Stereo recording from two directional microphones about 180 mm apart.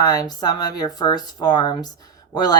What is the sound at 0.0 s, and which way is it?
Speech, 20° left (ahead or behind).